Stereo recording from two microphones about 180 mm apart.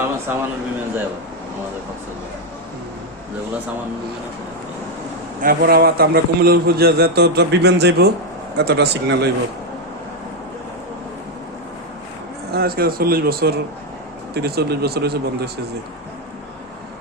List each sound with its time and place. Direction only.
0.3 s a man's voice: 10° right (ahead or behind)
5.4 s a man's voice: 55° right (ahead or behind)
12.5 s a man's voice: 60° right (ahead or behind)